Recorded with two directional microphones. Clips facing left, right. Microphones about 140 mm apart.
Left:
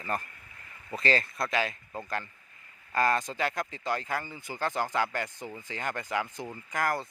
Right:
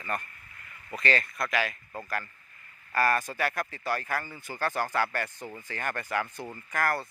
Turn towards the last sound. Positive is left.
turn(degrees=15)  # may be behind; listen again after turning